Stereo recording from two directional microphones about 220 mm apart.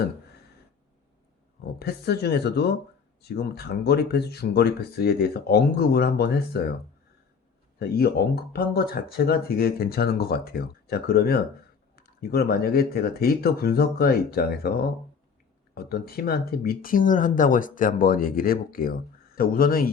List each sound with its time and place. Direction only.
1.8 s speech: 45° left (ahead or behind)
7.8 s speech: 45° left (ahead or behind)